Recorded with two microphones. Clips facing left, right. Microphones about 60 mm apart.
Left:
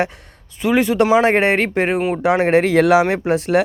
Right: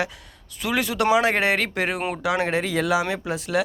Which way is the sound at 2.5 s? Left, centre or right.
Left.